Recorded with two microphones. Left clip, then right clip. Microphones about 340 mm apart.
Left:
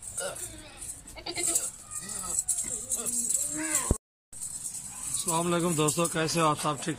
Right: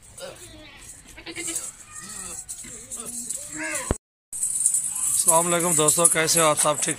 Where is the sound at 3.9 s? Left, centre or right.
Right.